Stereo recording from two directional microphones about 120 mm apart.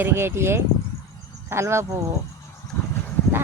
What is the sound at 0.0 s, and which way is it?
Speech, 20° right (ahead or behind).